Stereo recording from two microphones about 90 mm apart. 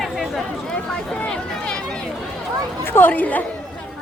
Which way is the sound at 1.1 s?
10° left (ahead or behind).